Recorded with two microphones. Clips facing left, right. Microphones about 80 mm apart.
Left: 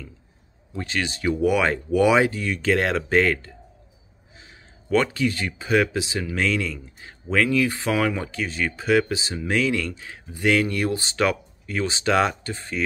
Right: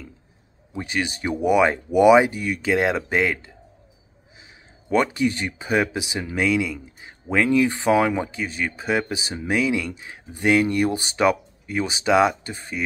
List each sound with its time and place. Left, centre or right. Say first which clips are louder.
0.7 s speech: right 1 dB; centre
4.8 s speech: right 1 dB; right